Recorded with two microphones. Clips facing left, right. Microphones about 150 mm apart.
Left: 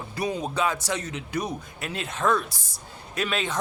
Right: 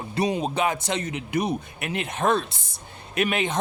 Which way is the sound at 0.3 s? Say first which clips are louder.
Right 2 dB; 20° right (ahead or behind).